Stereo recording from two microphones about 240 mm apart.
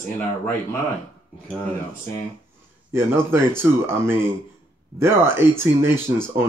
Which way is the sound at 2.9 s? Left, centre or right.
Centre.